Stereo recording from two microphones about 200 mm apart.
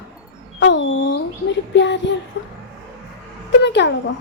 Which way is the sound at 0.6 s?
65° left (ahead or behind).